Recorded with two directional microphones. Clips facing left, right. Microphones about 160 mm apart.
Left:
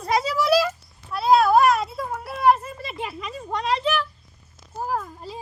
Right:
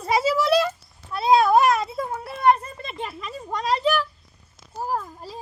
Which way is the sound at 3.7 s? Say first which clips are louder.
Right 2 dB; 40° right (ahead or behind).